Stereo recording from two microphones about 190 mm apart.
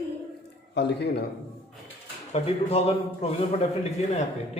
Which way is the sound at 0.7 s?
65° left (ahead or behind).